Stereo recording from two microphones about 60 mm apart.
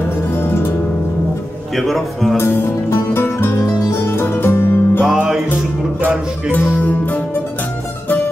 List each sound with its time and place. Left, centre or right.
0.3 s music: left
1.8 s a man's voice: centre
2.3 s music: left
5.0 s music: centre
6.8 s music: left